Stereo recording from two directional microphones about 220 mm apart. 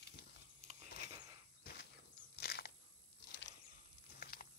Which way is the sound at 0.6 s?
30° right (ahead or behind).